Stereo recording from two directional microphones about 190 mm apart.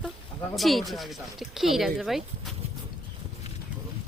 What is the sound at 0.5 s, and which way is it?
Speech, centre (ahead or behind).